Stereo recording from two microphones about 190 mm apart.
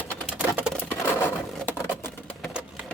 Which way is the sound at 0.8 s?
10° left (ahead or behind).